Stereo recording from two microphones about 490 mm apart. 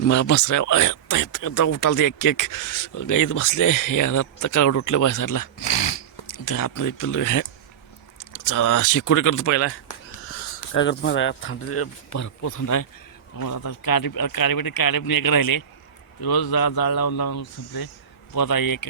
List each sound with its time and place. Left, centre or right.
0.1 s speech: left